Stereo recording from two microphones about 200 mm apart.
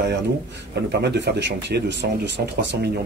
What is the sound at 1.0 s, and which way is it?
Speech, 60° right (ahead or behind).